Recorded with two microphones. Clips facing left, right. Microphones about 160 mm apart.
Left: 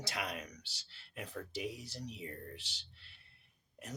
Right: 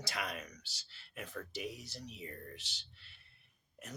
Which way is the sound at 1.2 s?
35° left (ahead or behind).